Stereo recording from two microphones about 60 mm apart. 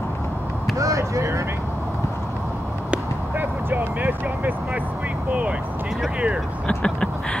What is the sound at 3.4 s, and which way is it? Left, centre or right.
Vehicle, right.